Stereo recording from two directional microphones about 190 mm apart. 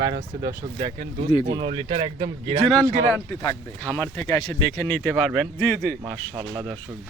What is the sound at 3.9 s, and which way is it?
Speech, 15° left (ahead or behind).